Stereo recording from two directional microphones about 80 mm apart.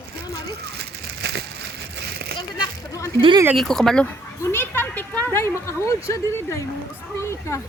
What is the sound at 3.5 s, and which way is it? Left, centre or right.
Speech, centre.